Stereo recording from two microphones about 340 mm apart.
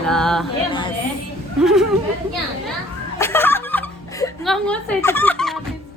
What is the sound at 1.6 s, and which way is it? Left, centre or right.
Speech, centre.